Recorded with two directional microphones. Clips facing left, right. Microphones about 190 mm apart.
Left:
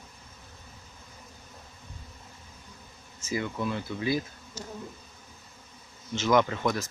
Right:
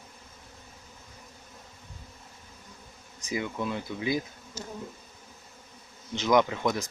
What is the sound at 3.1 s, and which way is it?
Speech, 15° right (ahead or behind).